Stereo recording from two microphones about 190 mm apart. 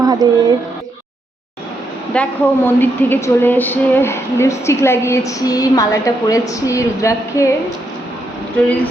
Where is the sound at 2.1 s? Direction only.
10° left (ahead or behind).